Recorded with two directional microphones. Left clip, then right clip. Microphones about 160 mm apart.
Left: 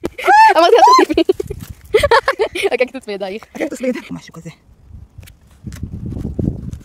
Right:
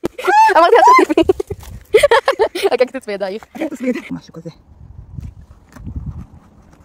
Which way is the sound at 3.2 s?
5° right (ahead or behind).